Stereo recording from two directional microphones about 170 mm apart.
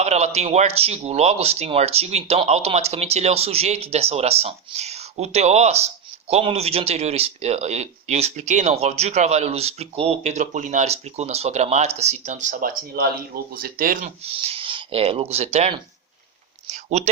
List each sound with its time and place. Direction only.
0.0 s speech: 40° right (ahead or behind); by 14.1 s 55° right (ahead or behind)
14.3 s speech: 35° right (ahead or behind)
16.6 s a sound: 45° right (ahead or behind)